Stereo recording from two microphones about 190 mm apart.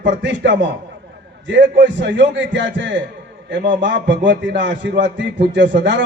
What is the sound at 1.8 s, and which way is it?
A man's voice, 70° right (ahead or behind).